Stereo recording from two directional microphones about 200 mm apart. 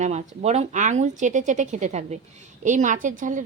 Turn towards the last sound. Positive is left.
turn(degrees=-40)  # may be behind; listen again after turning